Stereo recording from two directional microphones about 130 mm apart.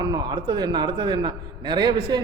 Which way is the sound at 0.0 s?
35° right (ahead or behind).